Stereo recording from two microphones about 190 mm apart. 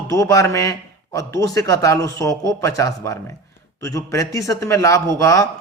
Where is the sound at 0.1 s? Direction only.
15° left (ahead or behind).